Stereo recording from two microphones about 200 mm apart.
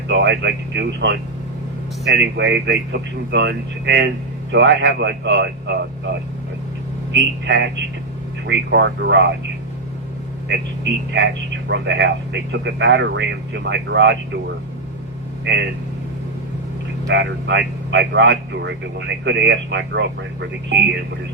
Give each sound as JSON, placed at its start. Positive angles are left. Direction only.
{"t": 0.1, "sound": "a man's voice", "side_deg": -65}
{"t": 11.1, "sound": "a man's voice", "side_deg": -60}
{"t": 15.5, "sound": "a man's voice", "side_deg": -60}
{"t": 17.1, "sound": "a man's voice", "side_deg": -60}